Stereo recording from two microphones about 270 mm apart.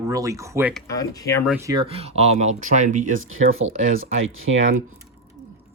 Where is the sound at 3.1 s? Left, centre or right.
Right.